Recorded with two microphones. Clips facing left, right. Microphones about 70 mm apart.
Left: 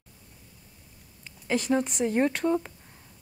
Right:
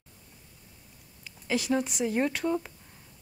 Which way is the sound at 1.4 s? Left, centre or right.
Centre.